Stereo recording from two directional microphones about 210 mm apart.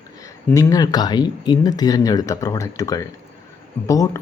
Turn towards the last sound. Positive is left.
turn(degrees=15)  # may be behind; listen again after turning